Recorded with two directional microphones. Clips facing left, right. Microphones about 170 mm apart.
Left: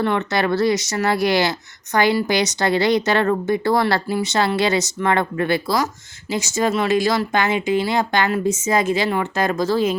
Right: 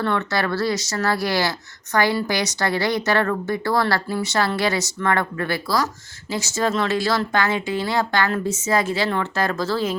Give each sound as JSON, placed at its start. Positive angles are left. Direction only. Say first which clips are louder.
{"t": 0.0, "sound": "speech", "louder": "left 3 dB", "side_deg": 15}